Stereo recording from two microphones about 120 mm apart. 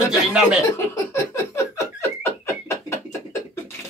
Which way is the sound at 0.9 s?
25° left (ahead or behind).